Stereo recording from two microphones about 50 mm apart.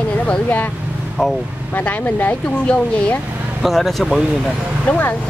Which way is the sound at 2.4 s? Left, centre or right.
Left.